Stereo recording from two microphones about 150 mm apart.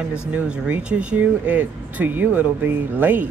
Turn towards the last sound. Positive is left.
turn(degrees=-10)  # may be behind; listen again after turning